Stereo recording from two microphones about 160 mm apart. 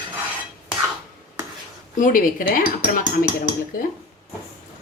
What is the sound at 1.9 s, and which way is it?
A woman's voice, 55° left (ahead or behind).